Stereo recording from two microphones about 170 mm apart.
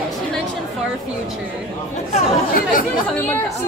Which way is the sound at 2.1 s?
55° left (ahead or behind).